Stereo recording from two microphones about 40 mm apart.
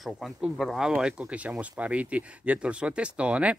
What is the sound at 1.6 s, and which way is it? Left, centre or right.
Speech, right.